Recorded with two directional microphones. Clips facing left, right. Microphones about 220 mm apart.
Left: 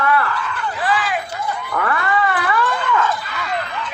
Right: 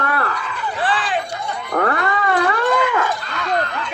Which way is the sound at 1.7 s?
40° right (ahead or behind).